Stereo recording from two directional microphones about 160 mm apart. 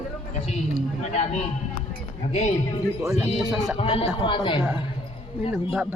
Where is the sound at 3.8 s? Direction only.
35° left (ahead or behind).